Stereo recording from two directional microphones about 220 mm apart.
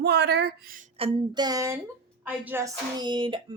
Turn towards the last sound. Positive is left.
turn(degrees=-20)  # may be behind; listen again after turning